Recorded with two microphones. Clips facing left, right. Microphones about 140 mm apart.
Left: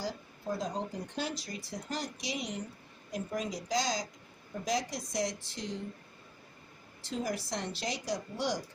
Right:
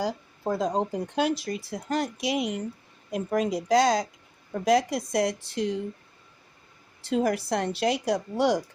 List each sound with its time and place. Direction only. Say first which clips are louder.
0.0 s speech: right 9 dB; 80° right
0.8 s speech: right 10 dB; 70° right (ahead or behind)
7.0 s speech: right 10 dB; 65° right (ahead or behind)